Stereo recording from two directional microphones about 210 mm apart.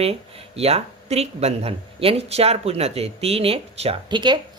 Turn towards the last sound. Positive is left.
turn(degrees=-20)  # may be behind; listen again after turning